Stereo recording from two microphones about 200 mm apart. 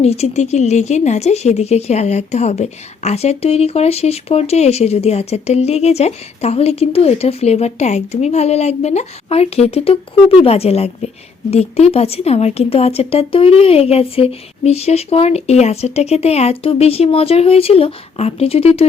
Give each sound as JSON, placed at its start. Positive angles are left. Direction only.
{"t": 0.0, "sound": "speech", "side_deg": 30}